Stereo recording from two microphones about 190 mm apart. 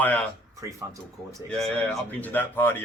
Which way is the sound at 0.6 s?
15° right (ahead or behind).